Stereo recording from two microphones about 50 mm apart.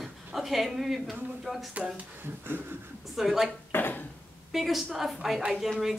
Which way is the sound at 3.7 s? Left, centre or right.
Left.